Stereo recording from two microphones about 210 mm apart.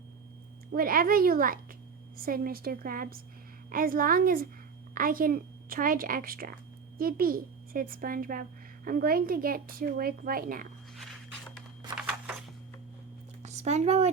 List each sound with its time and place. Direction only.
0.7 s a woman's voice: 45° right (ahead or behind)
11.9 s a sound: 5° right (ahead or behind)
13.4 s speech: 35° right (ahead or behind)